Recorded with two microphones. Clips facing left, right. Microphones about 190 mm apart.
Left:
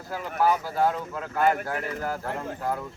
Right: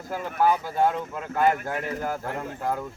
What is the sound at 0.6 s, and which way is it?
Speech, 20° right (ahead or behind).